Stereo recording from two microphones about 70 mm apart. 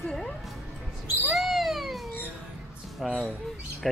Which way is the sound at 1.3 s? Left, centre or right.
Centre.